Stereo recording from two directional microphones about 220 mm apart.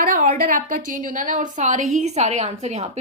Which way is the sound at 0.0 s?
40° right (ahead or behind).